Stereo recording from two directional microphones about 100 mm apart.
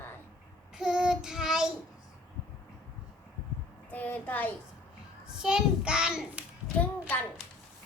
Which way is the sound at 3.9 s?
15° left (ahead or behind).